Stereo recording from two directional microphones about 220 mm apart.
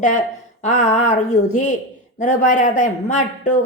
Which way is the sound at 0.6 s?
30° left (ahead or behind).